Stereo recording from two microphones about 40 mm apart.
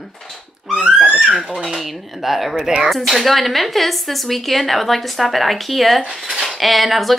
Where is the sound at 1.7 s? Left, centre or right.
Centre.